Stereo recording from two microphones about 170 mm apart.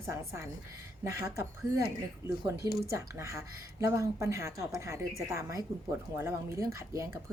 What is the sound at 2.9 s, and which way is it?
A woman's voice, 15° right (ahead or behind).